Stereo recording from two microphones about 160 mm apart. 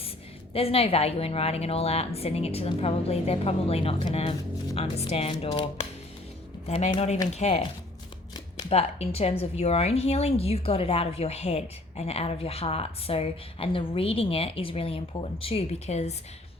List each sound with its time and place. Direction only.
0.5 s a woman's voice: 35° left (ahead or behind)
6.7 s a woman's voice: 40° left (ahead or behind)
8.7 s a woman's voice: 40° left (ahead or behind)